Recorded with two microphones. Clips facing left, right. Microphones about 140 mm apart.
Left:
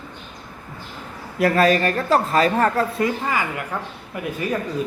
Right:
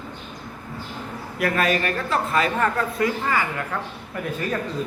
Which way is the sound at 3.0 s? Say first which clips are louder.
Even; 15° left (ahead or behind).